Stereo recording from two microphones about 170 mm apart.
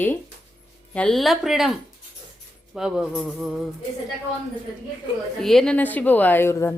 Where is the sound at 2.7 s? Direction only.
5° right (ahead or behind).